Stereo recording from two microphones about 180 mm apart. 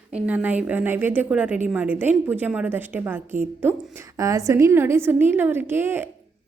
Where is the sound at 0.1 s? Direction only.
10° right (ahead or behind).